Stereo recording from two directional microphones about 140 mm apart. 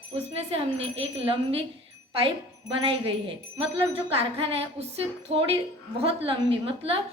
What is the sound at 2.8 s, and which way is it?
A woman's voice, 40° right (ahead or behind).